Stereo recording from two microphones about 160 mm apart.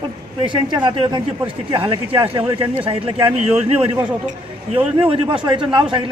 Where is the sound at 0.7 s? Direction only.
30° right (ahead or behind).